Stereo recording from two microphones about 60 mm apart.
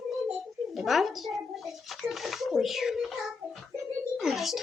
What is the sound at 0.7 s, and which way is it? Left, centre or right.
Speech, centre.